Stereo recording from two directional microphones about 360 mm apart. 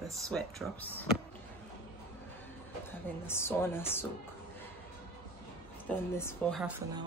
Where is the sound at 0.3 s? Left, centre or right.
Centre.